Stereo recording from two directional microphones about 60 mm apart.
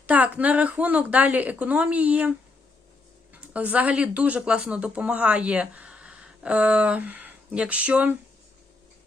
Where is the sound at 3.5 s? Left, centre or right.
Right.